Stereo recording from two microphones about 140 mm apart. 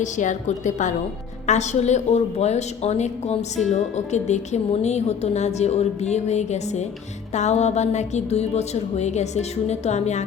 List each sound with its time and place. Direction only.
0.0 s a woman's voice: 60° left (ahead or behind)